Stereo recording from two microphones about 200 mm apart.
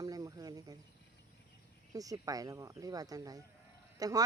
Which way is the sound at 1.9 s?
15° right (ahead or behind).